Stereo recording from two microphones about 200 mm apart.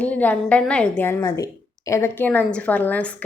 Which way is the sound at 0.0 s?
5° left (ahead or behind).